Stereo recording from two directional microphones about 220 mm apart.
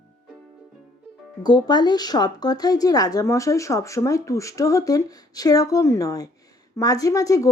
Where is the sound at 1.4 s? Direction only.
20° left (ahead or behind).